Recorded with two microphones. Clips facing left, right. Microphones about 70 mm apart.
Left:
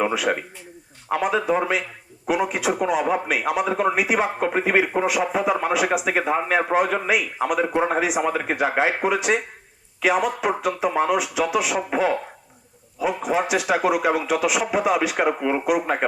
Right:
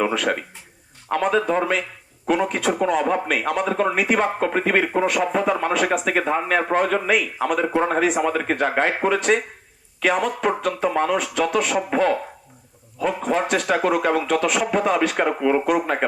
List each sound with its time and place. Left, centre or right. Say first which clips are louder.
0.0 s speech: even; centre